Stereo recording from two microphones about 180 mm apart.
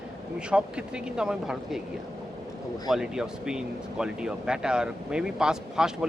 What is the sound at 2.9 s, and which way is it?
Speech, 5° right (ahead or behind).